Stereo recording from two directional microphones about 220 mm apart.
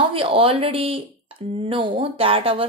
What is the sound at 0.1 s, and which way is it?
Speech, 25° right (ahead or behind).